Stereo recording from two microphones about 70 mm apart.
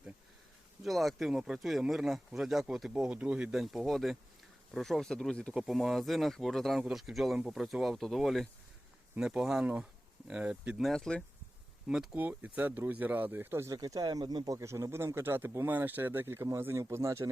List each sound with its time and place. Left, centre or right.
0.8 s speech: centre
2.9 s speech: centre
3.8 s speech: centre
5.5 s speech: centre
10.9 s speech: centre
12.1 s speech: right
13.7 s speech: right
14.6 s speech: right